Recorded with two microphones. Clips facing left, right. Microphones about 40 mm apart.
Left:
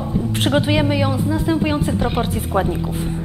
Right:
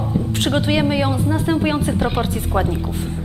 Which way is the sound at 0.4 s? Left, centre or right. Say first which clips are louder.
Left 1 dB; centre.